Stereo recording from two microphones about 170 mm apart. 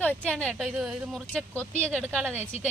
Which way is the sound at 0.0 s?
10° left (ahead or behind).